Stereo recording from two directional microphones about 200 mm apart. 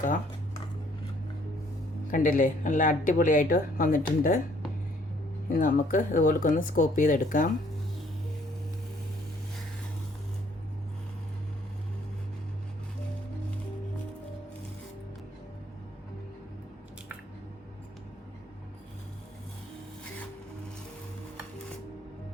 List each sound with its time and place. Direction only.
2.0 s a woman's voice: 45° left (ahead or behind)
5.5 s speech: 45° left (ahead or behind)